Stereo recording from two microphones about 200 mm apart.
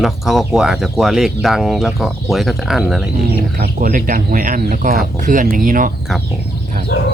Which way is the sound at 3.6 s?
45° right (ahead or behind).